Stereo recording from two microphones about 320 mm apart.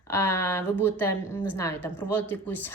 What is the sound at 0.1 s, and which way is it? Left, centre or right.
A woman's voice, centre.